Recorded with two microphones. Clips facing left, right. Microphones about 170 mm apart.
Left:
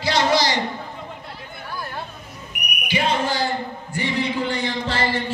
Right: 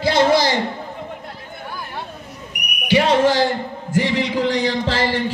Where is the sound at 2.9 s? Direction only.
90° right.